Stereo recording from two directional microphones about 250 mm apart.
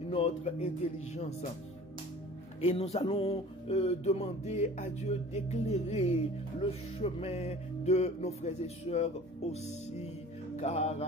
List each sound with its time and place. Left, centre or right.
0.1 s music: left
2.6 s music: left